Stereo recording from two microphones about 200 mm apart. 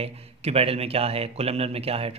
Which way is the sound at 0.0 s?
30° right (ahead or behind).